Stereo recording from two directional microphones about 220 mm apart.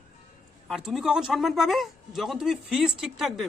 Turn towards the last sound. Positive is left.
turn(degrees=0)  # may be behind; listen again after turning